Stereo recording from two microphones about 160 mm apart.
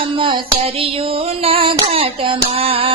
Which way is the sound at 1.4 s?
35° right (ahead or behind).